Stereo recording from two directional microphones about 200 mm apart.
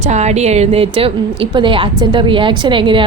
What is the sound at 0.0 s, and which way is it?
A woman's voice, 35° right (ahead or behind).